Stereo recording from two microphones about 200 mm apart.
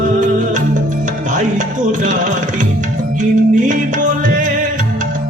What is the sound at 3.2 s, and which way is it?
Music, 40° right (ahead or behind).